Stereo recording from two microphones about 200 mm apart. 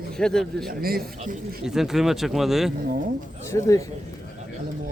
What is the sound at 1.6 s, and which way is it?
Speech, centre (ahead or behind).